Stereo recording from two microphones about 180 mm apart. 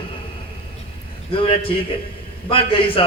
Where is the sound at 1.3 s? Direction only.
30° left (ahead or behind).